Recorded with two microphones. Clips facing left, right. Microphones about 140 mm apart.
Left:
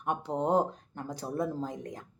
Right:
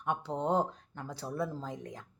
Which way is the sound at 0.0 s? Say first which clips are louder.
Left 3 dB; 45° left (ahead or behind).